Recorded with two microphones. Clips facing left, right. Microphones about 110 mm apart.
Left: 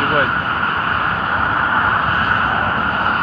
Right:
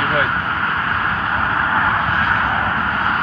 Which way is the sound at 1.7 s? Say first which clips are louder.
Left 1 dB; 50° left (ahead or behind).